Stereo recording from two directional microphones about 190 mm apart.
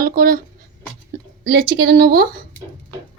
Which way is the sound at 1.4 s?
60° right (ahead or behind).